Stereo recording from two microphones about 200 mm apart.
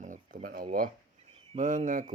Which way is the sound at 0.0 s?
40° right (ahead or behind).